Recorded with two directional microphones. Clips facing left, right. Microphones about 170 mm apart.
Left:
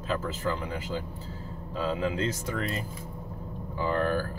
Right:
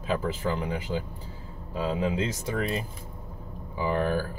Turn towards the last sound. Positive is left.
turn(degrees=-15)  # may be behind; listen again after turning